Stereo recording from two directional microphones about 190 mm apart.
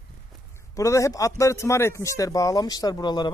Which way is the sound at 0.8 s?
15° left (ahead or behind).